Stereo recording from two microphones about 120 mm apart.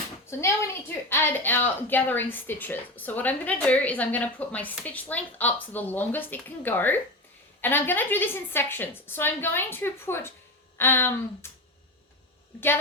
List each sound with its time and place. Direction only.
0.3 s a woman's voice: 20° left (ahead or behind)
12.5 s a woman's voice: 20° left (ahead or behind)